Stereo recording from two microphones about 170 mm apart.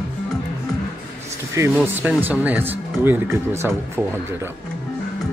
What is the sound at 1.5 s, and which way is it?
Speech, 15° right (ahead or behind).